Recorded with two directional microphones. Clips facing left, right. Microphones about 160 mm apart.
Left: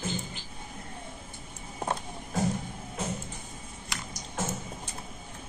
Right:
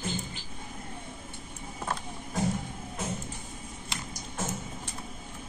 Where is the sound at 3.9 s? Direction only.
25° right (ahead or behind).